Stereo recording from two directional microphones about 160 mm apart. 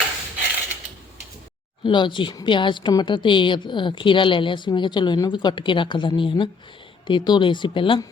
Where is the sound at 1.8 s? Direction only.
30° left (ahead or behind).